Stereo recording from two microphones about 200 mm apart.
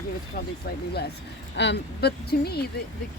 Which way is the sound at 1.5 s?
60° left (ahead or behind).